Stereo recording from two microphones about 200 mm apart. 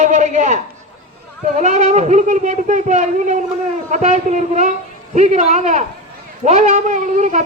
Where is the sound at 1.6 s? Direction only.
35° right (ahead or behind).